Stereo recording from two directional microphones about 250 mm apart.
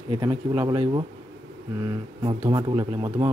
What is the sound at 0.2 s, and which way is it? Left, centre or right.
Speech, centre.